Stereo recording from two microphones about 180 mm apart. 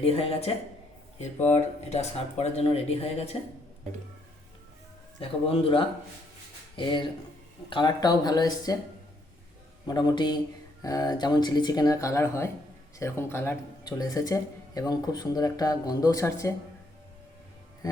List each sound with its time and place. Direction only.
0.0 s speech: 35° left (ahead or behind)
5.2 s speech: 30° left (ahead or behind)
9.8 s speech: 25° left (ahead or behind)